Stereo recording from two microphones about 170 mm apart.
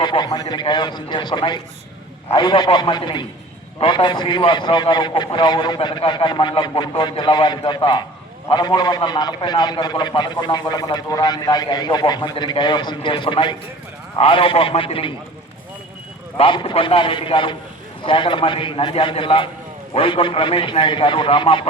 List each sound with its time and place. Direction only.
0.0 s a man's voice: 25° left (ahead or behind)
16.4 s a man's voice: 30° left (ahead or behind)